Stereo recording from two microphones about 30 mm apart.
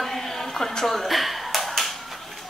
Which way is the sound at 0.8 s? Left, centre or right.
Centre.